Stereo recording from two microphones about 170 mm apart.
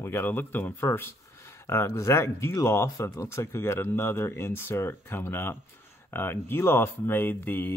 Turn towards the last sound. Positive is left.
turn(degrees=10)  # may be behind; listen again after turning